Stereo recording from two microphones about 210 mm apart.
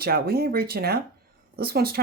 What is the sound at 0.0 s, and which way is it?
Speech, 45° right (ahead or behind).